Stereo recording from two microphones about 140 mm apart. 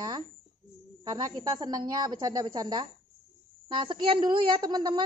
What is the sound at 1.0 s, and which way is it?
Speech, 30° right (ahead or behind).